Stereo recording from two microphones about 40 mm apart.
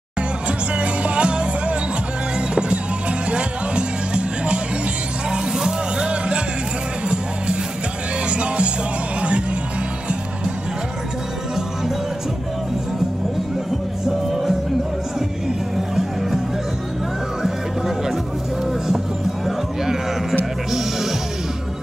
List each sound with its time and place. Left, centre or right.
0.7 s music: right
3.3 s music: right
5.3 s music: centre
6.0 s music: right
8.3 s music: right
14.0 s music: centre
17.4 s music: centre